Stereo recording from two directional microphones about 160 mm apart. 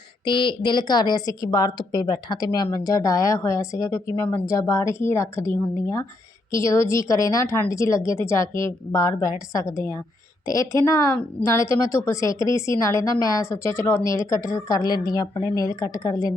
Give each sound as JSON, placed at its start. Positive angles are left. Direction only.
{"t": 0.3, "sound": "a woman's voice", "side_deg": 30}